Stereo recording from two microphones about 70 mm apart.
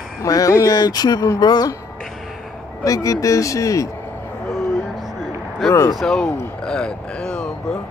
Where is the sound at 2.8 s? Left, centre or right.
Left.